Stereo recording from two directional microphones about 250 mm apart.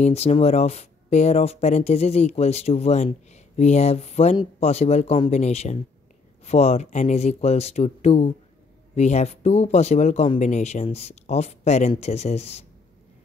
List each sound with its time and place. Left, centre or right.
0.0 s speech: left